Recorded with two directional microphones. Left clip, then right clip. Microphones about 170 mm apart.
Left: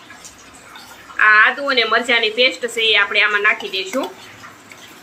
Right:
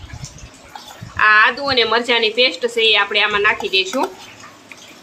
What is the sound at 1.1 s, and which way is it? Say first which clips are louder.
Speech: even; 40° right (ahead or behind).